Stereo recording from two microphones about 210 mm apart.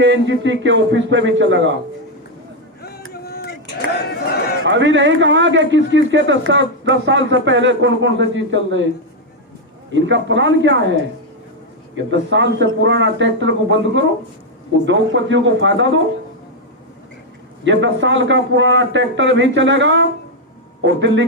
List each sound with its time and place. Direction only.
0.0 s speech: 60° right (ahead or behind)
3.1 s a sound: 50° left (ahead or behind)
4.6 s speech: 60° right (ahead or behind)
9.9 s speech: 60° right (ahead or behind)
12.3 s speech: 60° right (ahead or behind)
17.6 s speech: 60° right (ahead or behind)